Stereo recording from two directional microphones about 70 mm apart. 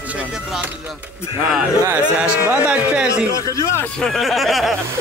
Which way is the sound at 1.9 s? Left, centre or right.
Centre.